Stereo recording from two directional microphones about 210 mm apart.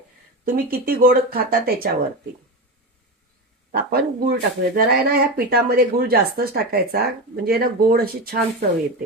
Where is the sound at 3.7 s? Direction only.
45° right (ahead or behind).